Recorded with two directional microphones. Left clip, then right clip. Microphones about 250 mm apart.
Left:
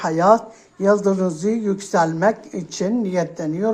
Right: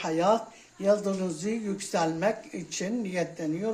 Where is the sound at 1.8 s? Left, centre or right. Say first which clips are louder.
Left 8 dB; centre.